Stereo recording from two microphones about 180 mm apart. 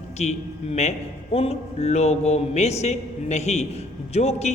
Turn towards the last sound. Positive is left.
turn(degrees=35)  # may be behind; listen again after turning